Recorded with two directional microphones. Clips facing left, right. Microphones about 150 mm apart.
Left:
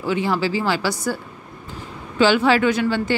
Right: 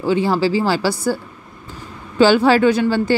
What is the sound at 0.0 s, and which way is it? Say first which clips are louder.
Speech: right 4 dB; 30° right (ahead or behind).